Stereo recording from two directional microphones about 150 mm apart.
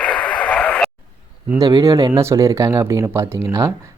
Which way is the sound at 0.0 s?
5° left (ahead or behind).